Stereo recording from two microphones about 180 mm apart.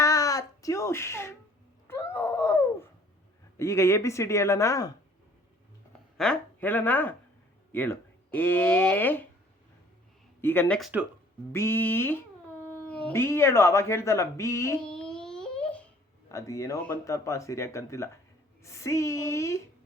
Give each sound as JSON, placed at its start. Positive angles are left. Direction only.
{"t": 0.0, "sound": "a sound", "side_deg": 15}
{"t": 3.6, "sound": "speech", "side_deg": 15}
{"t": 6.1, "sound": "speech", "side_deg": 5}
{"t": 10.4, "sound": "speech", "side_deg": 10}
{"t": 10.8, "sound": "speech", "side_deg": 0}
{"t": 11.5, "sound": "speech", "side_deg": 15}
{"t": 14.8, "sound": "a sound", "side_deg": 5}
{"t": 16.3, "sound": "speech", "side_deg": 15}